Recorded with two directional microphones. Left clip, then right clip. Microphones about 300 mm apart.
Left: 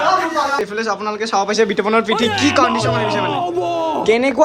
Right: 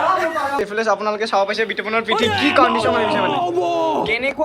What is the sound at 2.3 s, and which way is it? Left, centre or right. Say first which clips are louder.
A man's voice: right 1 dB; centre.